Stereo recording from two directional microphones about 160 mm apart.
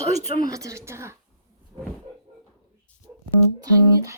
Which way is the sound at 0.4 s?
20° right (ahead or behind).